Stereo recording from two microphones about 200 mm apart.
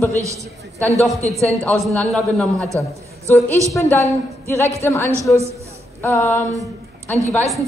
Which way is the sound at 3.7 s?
15° left (ahead or behind).